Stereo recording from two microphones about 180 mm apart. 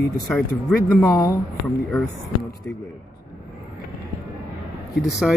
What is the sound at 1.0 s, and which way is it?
Speech, 20° left (ahead or behind).